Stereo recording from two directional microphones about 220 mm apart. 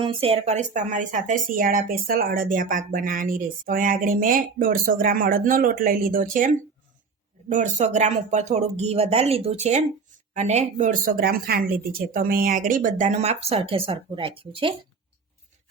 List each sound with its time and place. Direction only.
0.0 s speech: 25° right (ahead or behind)